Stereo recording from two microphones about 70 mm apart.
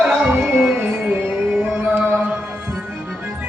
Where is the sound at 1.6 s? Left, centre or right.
Right.